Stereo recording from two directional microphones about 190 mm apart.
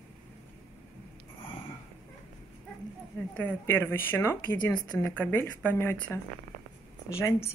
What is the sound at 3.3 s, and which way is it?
Speech, 10° left (ahead or behind).